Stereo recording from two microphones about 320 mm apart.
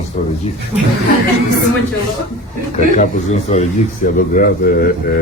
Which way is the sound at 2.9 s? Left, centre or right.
Left.